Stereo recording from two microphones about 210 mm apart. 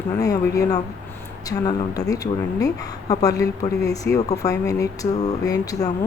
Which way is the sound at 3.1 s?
15° left (ahead or behind).